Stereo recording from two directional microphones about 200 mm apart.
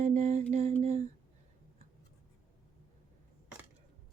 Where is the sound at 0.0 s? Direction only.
35° right (ahead or behind).